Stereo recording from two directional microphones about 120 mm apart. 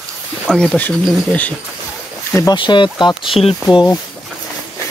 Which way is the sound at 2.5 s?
40° left (ahead or behind).